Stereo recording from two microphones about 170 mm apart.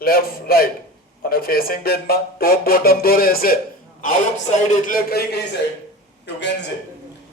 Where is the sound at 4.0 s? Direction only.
45° left (ahead or behind).